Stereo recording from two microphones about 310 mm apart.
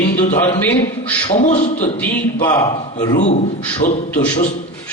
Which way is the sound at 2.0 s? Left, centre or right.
Centre.